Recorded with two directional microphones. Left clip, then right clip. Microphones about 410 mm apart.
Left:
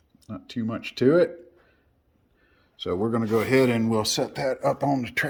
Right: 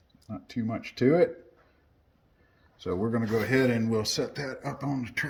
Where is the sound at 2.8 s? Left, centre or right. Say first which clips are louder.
Left 4 dB; centre.